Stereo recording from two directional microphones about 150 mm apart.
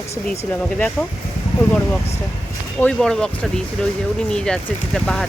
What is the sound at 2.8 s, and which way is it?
Speech, 5° left (ahead or behind).